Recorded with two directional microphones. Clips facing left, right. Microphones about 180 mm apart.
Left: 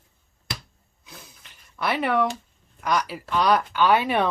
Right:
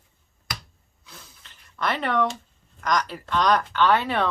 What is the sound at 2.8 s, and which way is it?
Speech, 10° left (ahead or behind).